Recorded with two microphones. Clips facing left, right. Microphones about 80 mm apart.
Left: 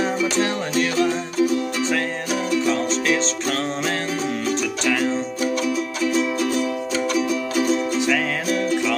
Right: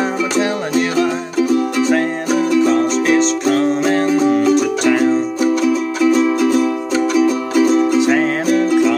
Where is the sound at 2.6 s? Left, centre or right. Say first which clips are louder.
Right 7 dB; right.